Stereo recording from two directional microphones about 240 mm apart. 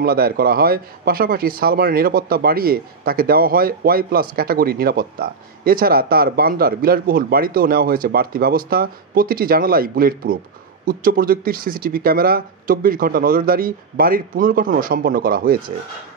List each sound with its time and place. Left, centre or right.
0.0 s speech: right